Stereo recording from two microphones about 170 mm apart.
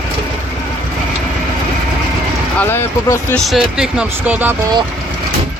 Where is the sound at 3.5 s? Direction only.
Centre (ahead or behind).